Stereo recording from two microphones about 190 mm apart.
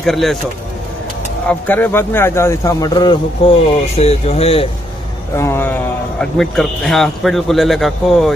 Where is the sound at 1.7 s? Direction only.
10° left (ahead or behind); by 4.6 s 30° left (ahead or behind).